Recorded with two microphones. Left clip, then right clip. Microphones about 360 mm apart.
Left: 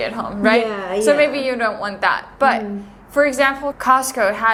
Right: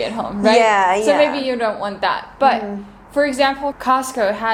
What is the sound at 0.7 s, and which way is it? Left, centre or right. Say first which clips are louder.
Speech: right 8 dB; right.